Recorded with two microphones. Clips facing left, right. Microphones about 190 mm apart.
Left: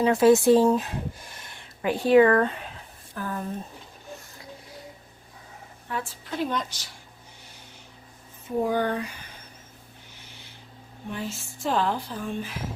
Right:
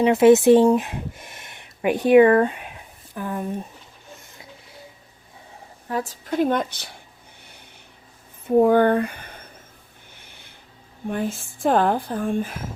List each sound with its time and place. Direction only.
0.0 s speech: 20° right (ahead or behind)
5.9 s speech: 40° right (ahead or behind); by 7.0 s 60° right (ahead or behind)
8.4 s speech: 55° right (ahead or behind)
10.2 s owl: 55° right (ahead or behind)
11.1 s speech: 55° right (ahead or behind)